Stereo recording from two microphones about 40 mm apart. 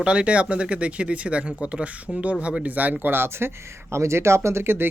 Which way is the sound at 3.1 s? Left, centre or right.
Right.